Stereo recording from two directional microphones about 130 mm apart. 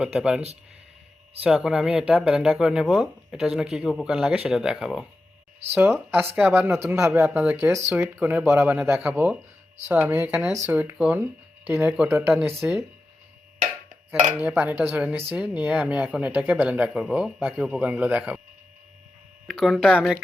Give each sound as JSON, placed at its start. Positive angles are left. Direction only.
{"t": 0.0, "sound": "speech", "side_deg": -5}
{"t": 1.5, "sound": "speech", "side_deg": -5}
{"t": 5.7, "sound": "speech", "side_deg": -15}
{"t": 12.1, "sound": "speech", "side_deg": -10}
{"t": 14.4, "sound": "speech", "side_deg": -10}
{"t": 19.5, "sound": "speech", "side_deg": 0}